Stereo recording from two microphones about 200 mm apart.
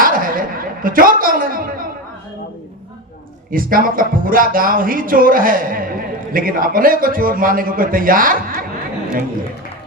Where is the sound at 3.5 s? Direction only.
45° right (ahead or behind).